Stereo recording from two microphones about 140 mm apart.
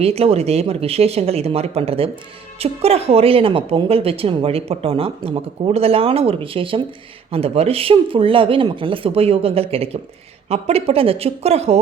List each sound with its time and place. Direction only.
0.0 s speech: 45° right (ahead or behind)